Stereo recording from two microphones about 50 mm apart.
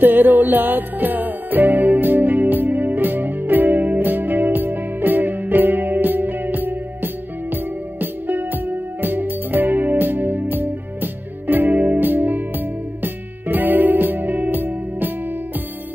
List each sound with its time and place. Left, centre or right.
0.0 s music: right